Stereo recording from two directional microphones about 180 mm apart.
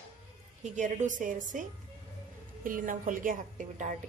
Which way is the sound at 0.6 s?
45° right (ahead or behind).